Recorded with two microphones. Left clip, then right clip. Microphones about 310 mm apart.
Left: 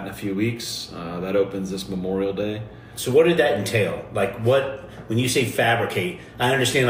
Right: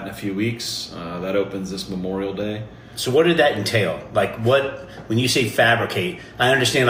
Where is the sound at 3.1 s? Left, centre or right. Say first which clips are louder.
Right 1 dB; right.